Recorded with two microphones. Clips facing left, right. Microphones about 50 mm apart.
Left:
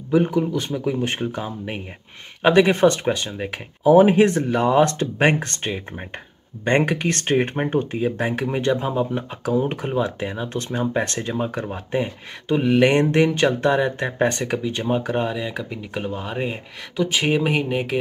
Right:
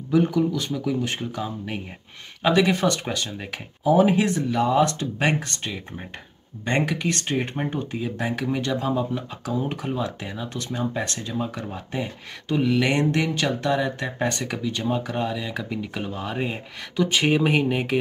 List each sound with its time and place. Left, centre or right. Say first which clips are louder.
0.1 s speech: left 2 dB; left
3.8 s speech: left 5 dB; left; by 17.9 s centre